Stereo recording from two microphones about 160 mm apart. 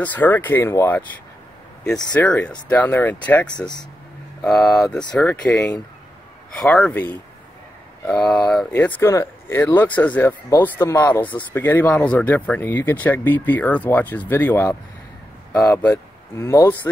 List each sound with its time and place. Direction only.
0.0 s speech: 10° left (ahead or behind)
2.1 s speech: 5° left (ahead or behind)
6.6 s speech: 5° left (ahead or behind)